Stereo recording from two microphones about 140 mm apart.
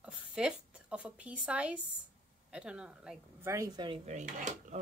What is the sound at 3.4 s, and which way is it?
Speech, 20° right (ahead or behind).